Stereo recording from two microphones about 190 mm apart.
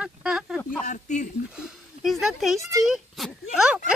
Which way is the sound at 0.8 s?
40° left (ahead or behind).